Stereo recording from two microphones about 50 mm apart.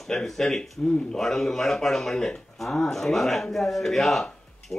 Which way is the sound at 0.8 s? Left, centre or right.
Centre.